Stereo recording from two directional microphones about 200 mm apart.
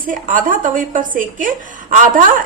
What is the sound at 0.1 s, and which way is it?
A woman's voice, 40° right (ahead or behind).